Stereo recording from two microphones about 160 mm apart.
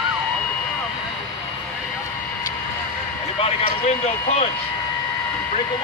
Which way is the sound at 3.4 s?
40° left (ahead or behind).